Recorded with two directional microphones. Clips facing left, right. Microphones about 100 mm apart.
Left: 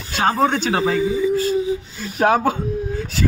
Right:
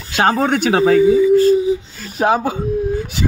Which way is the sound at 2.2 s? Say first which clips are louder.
Even; 15° right (ahead or behind).